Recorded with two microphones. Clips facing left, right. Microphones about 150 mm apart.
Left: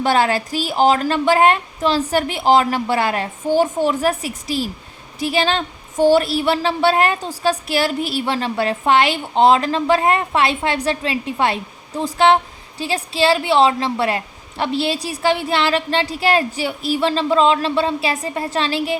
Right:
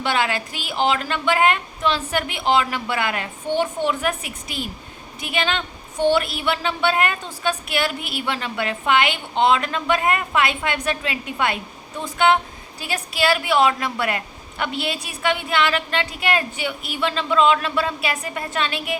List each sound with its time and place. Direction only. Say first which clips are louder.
0.0 s a woman's voice: left 6 dB; 40° left (ahead or behind)